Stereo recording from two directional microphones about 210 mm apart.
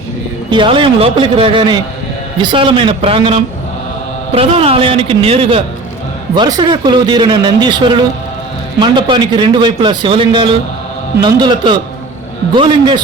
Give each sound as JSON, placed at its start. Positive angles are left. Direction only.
{"t": 0.5, "sound": "a man's voice", "side_deg": -25}